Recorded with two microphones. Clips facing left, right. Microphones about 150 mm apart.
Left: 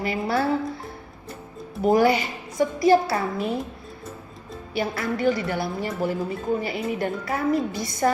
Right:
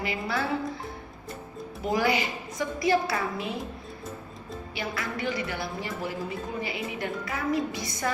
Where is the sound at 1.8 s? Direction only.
45° left (ahead or behind).